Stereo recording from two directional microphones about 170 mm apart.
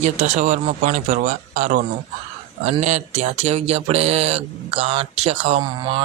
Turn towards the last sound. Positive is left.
turn(degrees=-25)  # may be behind; listen again after turning